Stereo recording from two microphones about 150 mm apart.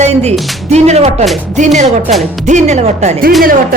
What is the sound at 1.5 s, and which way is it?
Speech, 50° right (ahead or behind).